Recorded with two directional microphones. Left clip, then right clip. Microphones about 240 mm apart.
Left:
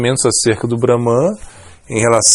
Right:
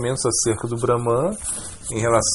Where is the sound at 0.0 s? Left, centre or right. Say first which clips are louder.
Left 8 dB; left.